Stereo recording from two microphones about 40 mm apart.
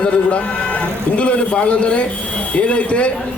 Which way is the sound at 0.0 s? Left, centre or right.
Left.